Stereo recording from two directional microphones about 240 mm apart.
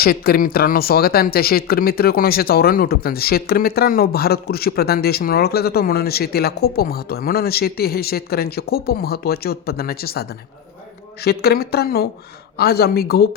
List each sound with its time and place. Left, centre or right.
0.0 s speech: left